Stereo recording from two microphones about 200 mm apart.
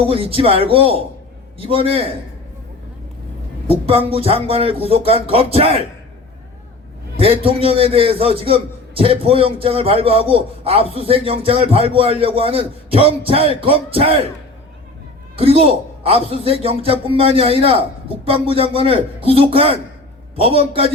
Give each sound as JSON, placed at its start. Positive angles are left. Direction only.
{"t": 0.0, "sound": "a man's voice", "side_deg": -30}
{"t": 3.7, "sound": "a man's voice", "side_deg": -30}
{"t": 7.2, "sound": "a man's voice", "side_deg": -30}
{"t": 15.4, "sound": "a man's voice", "side_deg": -30}